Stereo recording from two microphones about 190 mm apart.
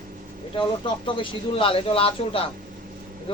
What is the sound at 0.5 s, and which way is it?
Speech, 25° left (ahead or behind).